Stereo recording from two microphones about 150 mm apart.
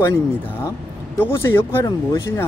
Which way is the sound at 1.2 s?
15° left (ahead or behind).